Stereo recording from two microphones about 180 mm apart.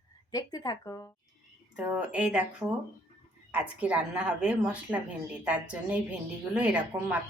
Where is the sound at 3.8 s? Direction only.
5° right (ahead or behind).